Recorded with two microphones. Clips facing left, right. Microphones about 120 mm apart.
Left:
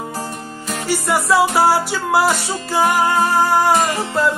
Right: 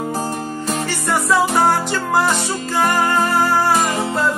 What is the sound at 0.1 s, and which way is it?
Music, 35° right (ahead or behind).